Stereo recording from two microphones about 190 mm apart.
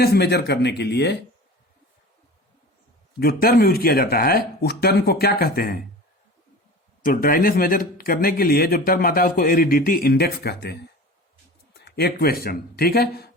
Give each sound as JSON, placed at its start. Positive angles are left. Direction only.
{"t": 0.0, "sound": "speech", "side_deg": 60}
{"t": 3.2, "sound": "speech", "side_deg": 55}
{"t": 7.0, "sound": "speech", "side_deg": 50}